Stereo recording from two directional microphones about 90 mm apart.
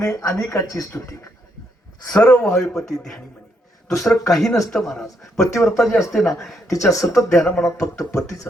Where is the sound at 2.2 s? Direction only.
10° left (ahead or behind).